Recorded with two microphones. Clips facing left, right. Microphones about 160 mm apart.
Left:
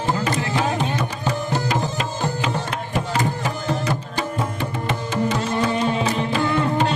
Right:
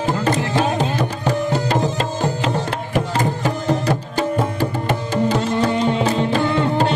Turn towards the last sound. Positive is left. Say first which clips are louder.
# right 2 dB
turn(degrees=-25)  # may be behind; listen again after turning